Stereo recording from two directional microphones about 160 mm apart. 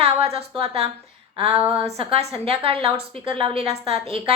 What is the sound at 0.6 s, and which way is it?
Speech, 40° right (ahead or behind).